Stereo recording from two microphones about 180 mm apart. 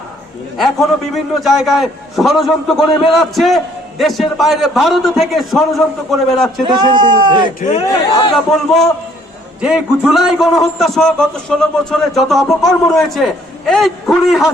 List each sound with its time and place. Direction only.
0.5 s a man's voice: centre (ahead or behind)
6.7 s a man's voice: 25° right (ahead or behind)
7.6 s a man's voice: 35° left (ahead or behind)
8.4 s a man's voice: centre (ahead or behind)